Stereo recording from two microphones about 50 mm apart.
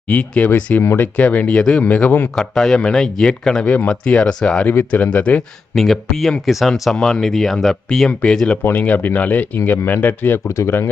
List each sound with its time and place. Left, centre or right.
0.1 s speech: left
1.5 s speech: centre
1.8 s speech: left
2.3 s speech: centre
4.6 s speech: left
5.1 s speech: left
5.7 s speech: centre
6.9 s speech: centre
8.7 s speech: left
9.7 s speech: left